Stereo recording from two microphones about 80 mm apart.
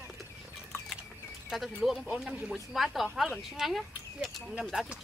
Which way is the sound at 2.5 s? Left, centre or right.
Centre.